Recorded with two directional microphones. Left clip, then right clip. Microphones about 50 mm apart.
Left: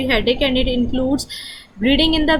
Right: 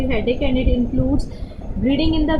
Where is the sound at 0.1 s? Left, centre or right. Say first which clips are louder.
Left 5 dB; left.